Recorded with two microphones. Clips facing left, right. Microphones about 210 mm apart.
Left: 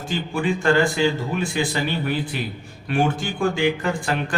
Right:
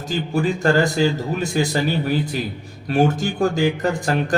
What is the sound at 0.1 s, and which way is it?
A man's voice, 40° right (ahead or behind).